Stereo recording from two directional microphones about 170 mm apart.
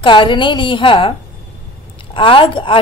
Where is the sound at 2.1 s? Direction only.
30° left (ahead or behind).